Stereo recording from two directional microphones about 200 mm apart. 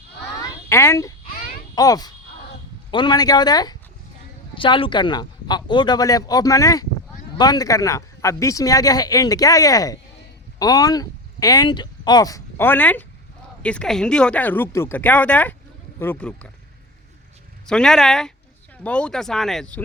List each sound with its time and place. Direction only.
0.7 s a sound: 15° left (ahead or behind)
1.7 s a child's voice: 20° left (ahead or behind)
17.7 s speech: 5° left (ahead or behind)